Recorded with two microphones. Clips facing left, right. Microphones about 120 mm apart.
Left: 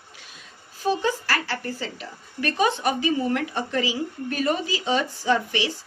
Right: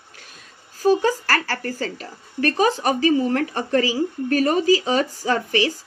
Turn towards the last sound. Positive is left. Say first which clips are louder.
# right 2 dB
turn(degrees=-45)  # may be behind; listen again after turning